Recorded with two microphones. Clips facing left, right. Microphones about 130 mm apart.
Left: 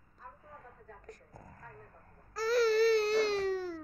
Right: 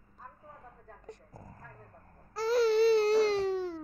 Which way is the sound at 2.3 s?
25° right (ahead or behind).